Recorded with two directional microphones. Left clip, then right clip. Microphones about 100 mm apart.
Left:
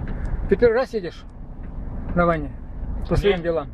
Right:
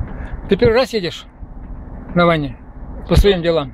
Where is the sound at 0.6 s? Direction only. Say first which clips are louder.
Right 5 dB; 40° right (ahead or behind).